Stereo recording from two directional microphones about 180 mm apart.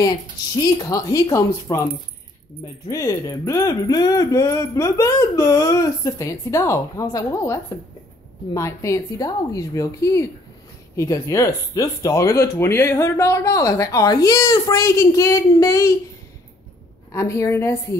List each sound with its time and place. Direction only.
0.0 s speech: 20° left (ahead or behind)
2.9 s speech: 20° left (ahead or behind)
17.1 s speech: 15° left (ahead or behind)